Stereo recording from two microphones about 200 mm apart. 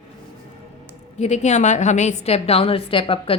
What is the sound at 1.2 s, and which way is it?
A woman's voice, 35° left (ahead or behind).